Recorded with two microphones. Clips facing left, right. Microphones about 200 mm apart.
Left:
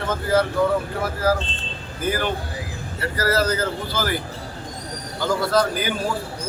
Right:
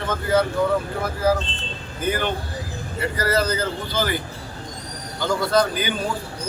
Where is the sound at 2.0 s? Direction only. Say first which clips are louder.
Even; 5° left (ahead or behind).